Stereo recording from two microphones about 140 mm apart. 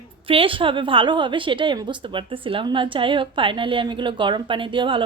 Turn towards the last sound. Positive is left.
turn(degrees=-35)  # may be behind; listen again after turning